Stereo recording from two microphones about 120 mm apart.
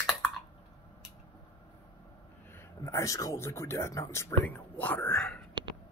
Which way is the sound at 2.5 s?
20° left (ahead or behind).